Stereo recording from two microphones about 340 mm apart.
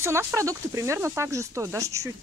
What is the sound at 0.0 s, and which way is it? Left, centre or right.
Speech, centre.